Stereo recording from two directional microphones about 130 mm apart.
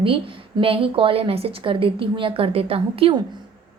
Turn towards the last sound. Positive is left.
turn(degrees=-45)  # may be behind; listen again after turning